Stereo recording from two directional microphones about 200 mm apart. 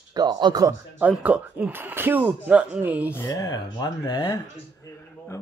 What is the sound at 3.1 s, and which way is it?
Speech, 15° left (ahead or behind).